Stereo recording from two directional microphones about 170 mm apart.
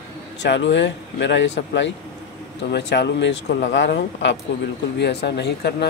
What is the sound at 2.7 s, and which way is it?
A man's voice, 85° left.